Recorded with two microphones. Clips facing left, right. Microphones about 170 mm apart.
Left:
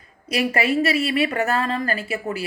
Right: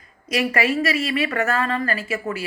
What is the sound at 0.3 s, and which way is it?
A woman's voice, 35° left (ahead or behind).